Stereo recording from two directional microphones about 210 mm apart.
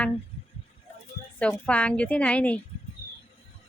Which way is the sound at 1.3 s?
5° left (ahead or behind).